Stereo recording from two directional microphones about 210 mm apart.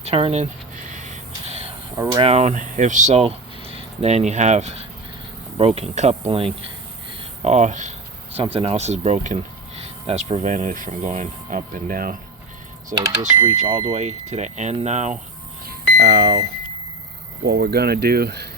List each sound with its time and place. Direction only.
0.0 s whispering: 30° right (ahead or behind)
2.2 s speech: 30° right (ahead or behind)
12.9 s speech: 15° right (ahead or behind)
13.5 s speech: 30° right (ahead or behind)
16.0 s speech: 50° right (ahead or behind)
17.4 s speech: 50° right (ahead or behind)